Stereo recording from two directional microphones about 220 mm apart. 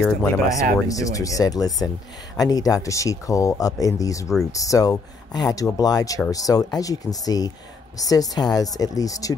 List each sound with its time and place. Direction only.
0.0 s speech: 10° left (ahead or behind)